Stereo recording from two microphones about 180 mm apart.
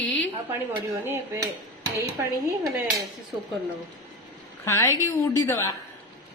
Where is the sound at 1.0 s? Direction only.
15° right (ahead or behind).